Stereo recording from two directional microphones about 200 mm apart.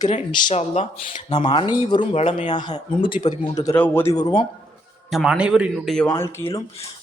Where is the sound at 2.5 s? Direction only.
20° left (ahead or behind).